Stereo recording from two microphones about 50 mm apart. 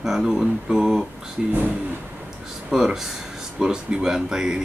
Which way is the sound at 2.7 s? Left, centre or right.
Centre.